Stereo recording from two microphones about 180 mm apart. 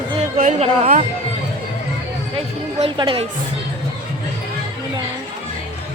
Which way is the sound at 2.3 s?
30° right (ahead or behind).